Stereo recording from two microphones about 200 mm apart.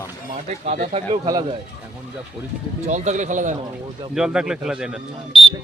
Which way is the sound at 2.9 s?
35° right (ahead or behind).